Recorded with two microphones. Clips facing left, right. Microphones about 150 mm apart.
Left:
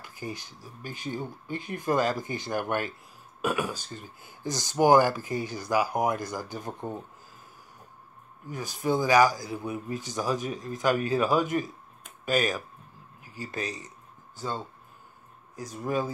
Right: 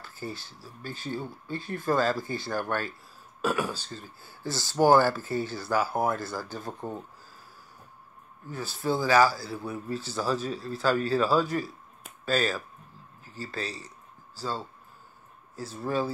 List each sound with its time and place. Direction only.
0.0 s a man's voice: 15° left (ahead or behind)
8.5 s a man's voice: 15° left (ahead or behind)
13.2 s a sound: 15° left (ahead or behind)
15.5 s a man's voice: 15° left (ahead or behind)